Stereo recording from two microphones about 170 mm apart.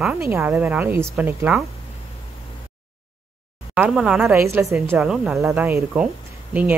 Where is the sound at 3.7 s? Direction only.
5° right (ahead or behind).